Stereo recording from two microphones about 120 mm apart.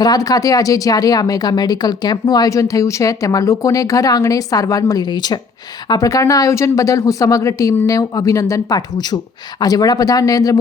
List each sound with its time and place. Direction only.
0.0 s speech: 30° left (ahead or behind)